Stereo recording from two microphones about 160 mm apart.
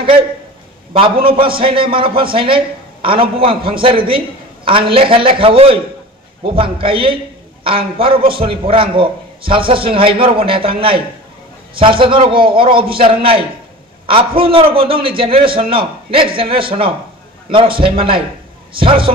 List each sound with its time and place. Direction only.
1.1 s a man's voice: 65° right (ahead or behind)
1.4 s a man's voice: 35° right (ahead or behind)